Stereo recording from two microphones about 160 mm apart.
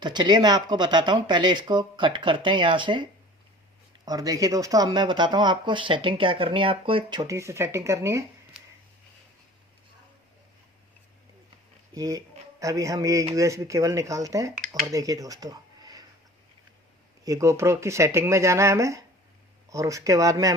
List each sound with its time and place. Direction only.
0.0 s speech: 25° right (ahead or behind)
11.9 s speech: 20° right (ahead or behind)
17.2 s speech: 20° right (ahead or behind)